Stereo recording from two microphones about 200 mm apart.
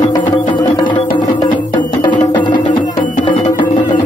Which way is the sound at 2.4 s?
25° left (ahead or behind).